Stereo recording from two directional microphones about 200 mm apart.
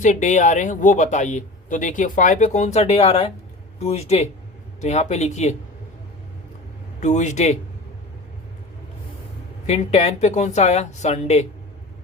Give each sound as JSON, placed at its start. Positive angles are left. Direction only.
{"t": 0.0, "sound": "speech", "side_deg": 35}
{"t": 7.0, "sound": "speech", "side_deg": 35}
{"t": 9.6, "sound": "speech", "side_deg": 35}